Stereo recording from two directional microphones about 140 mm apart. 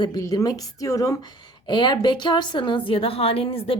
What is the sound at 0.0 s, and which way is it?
A woman's voice, 30° left (ahead or behind).